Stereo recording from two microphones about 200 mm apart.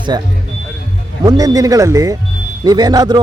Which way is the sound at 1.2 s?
20° right (ahead or behind).